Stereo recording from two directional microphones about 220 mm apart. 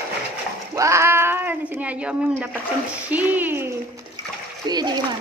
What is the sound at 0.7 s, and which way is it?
Speech, 15° right (ahead or behind).